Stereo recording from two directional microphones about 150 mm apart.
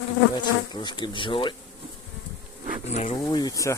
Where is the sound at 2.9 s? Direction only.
50° left (ahead or behind).